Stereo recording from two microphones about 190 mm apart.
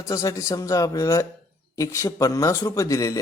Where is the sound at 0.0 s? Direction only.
20° left (ahead or behind).